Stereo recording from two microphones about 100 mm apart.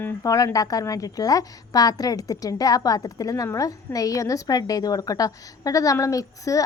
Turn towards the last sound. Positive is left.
turn(degrees=35)  # may be behind; listen again after turning